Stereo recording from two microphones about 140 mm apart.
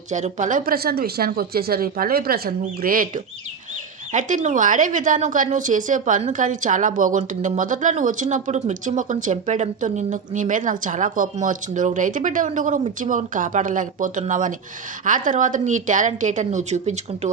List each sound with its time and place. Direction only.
0.1 s speech: 60° right (ahead or behind); by 3.1 s 90° right
4.1 s a woman's voice: 65° right (ahead or behind)